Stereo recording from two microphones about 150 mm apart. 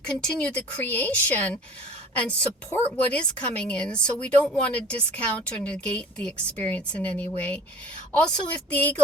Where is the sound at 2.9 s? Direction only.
5° left (ahead or behind).